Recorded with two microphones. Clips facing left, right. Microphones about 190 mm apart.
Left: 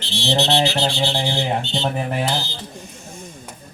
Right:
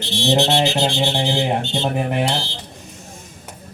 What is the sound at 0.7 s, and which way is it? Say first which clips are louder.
Music: right 2 dB; 20° right (ahead or behind).